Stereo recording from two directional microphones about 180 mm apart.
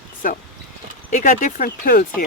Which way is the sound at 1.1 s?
45° left (ahead or behind).